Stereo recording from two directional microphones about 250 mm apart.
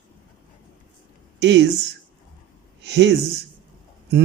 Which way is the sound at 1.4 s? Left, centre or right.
Right.